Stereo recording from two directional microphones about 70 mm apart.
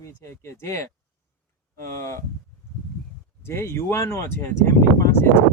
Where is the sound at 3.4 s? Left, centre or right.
Left.